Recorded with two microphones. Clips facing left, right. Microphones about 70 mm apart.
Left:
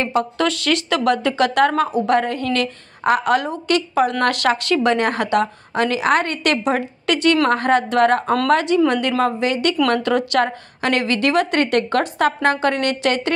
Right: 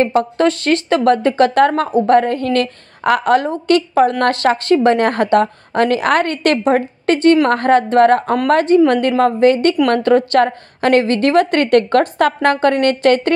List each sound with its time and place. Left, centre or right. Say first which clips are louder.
0.0 s a woman's voice: right 5 dB; right